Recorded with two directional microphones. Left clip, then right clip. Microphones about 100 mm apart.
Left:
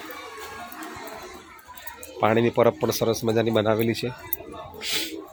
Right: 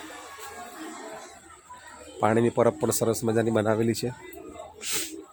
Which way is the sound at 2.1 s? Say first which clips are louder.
Left 2 dB; 20° right (ahead or behind).